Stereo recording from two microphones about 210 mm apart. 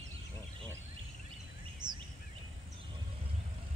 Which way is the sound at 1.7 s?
20° right (ahead or behind).